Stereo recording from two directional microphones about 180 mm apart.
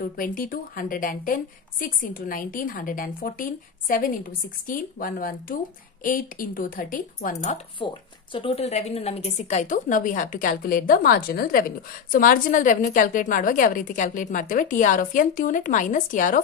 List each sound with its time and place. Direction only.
0.0 s a woman's voice: 50° left (ahead or behind)